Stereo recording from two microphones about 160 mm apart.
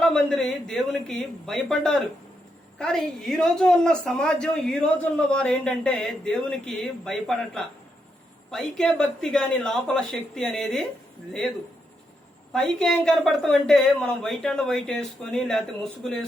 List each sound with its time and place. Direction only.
0.0 s a woman's voice: 5° left (ahead or behind)
12.5 s a woman's voice: 5° left (ahead or behind)